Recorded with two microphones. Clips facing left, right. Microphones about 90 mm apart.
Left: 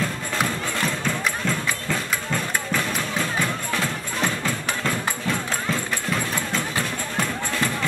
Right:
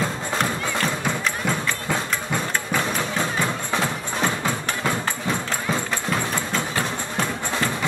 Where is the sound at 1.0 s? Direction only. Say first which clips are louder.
Right 1 dB; 15° right (ahead or behind).